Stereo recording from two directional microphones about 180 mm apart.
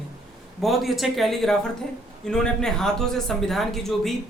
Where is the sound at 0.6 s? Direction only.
Centre (ahead or behind).